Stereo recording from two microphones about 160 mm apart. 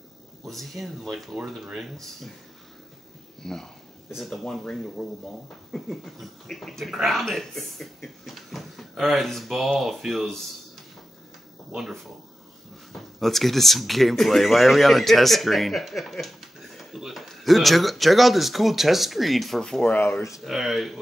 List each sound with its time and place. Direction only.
0.5 s speech: centre (ahead or behind)
3.4 s speech: 5° left (ahead or behind)
11.7 s speech: centre (ahead or behind); by 20.4 s 20° left (ahead or behind)
20.4 s speech: centre (ahead or behind)